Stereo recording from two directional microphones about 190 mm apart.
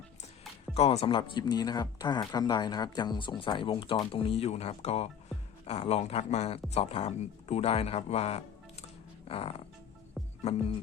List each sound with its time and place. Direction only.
0.7 s speech: 30° left (ahead or behind)
9.2 s music: 30° left (ahead or behind)
10.2 s music: centre (ahead or behind)